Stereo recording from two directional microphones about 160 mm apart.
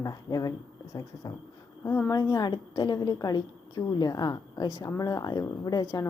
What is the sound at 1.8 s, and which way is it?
Speech, 15° left (ahead or behind).